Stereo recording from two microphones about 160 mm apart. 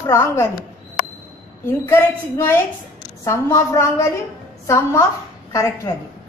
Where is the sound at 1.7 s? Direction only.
15° left (ahead or behind).